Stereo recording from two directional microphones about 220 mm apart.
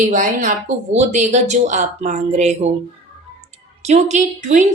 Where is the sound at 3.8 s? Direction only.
30° right (ahead or behind).